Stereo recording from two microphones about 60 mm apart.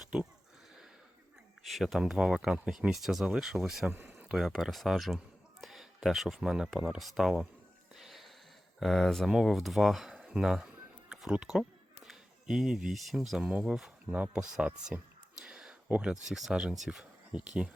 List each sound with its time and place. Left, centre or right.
1.6 s a man's voice: centre
7.9 s wheeze: centre
8.8 s speech: centre
10.2 s a sound: centre
12.5 s speech: centre
15.4 s a sound: centre
15.9 s speech: centre
16.2 s speech: centre
17.3 s speech: centre